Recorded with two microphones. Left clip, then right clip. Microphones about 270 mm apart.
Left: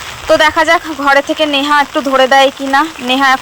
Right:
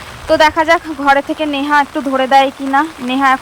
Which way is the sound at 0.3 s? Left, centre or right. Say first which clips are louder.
Left 1 dB; centre.